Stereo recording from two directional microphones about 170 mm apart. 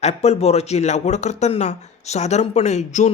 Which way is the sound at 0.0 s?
40° left (ahead or behind).